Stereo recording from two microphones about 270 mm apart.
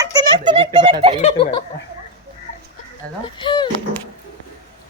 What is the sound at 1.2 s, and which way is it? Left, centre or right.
Speech, centre.